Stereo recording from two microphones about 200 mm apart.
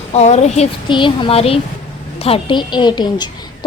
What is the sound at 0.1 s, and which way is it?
A woman's voice, 35° left (ahead or behind).